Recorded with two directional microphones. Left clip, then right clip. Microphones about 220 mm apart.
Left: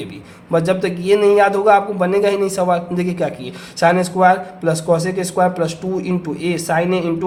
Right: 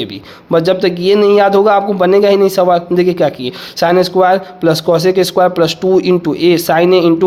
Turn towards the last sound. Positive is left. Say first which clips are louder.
# right 9 dB
turn(degrees=-35)  # may be behind; listen again after turning